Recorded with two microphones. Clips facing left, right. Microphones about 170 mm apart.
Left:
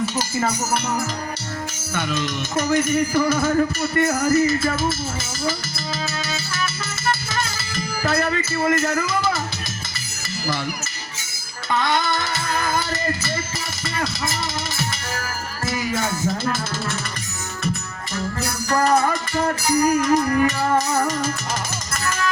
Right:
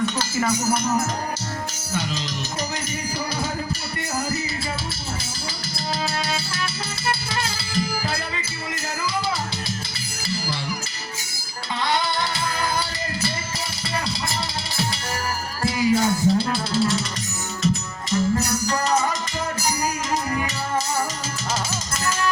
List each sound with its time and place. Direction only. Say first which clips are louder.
2.0 s music: left 4 dB; 55° left (ahead or behind)
8.0 s music: left 7 dB; 50° left (ahead or behind)
11.7 s music: left 3 dB; 50° left (ahead or behind)
15.6 s music: right 5 dB; 50° left (ahead or behind)
18.7 s music: left 6 dB; 55° left (ahead or behind)